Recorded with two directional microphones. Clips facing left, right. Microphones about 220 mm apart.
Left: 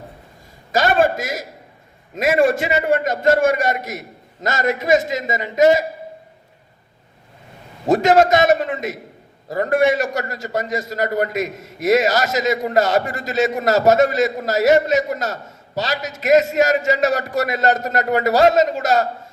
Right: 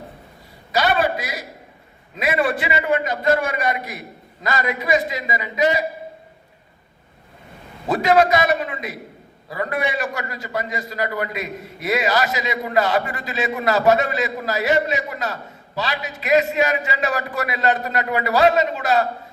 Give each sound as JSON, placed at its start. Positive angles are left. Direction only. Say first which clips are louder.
{"t": 0.7, "sound": "a sound", "louder": "left 3 dB", "side_deg": 45}
{"t": 2.1, "sound": "a man's voice", "louder": "left 5 dB", "side_deg": 45}
{"t": 7.9, "sound": "a man's voice", "louder": "left 3 dB", "side_deg": 45}